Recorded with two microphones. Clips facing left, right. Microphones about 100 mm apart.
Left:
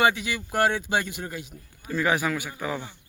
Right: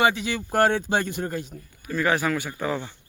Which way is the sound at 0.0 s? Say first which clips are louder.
Right 1 dB; 25° right (ahead or behind).